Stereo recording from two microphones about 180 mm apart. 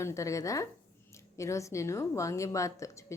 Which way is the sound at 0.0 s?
15° left (ahead or behind).